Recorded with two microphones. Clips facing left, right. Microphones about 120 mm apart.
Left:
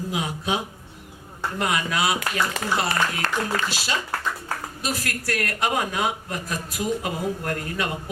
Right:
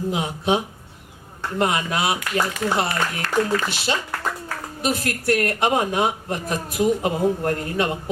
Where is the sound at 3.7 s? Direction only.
25° right (ahead or behind).